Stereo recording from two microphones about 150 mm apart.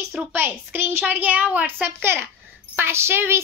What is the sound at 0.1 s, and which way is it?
A child's voice, 15° right (ahead or behind).